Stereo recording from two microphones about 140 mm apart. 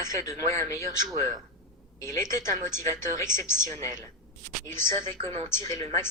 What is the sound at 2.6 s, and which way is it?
Speech, 20° left (ahead or behind).